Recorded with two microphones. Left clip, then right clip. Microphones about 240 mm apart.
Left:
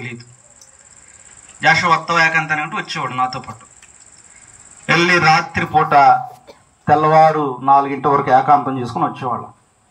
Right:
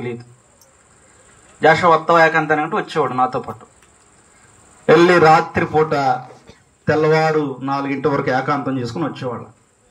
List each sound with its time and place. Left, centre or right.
0.0 s a man's voice: right
1.6 s a man's voice: right
4.8 s a man's voice: right
6.8 s speech: centre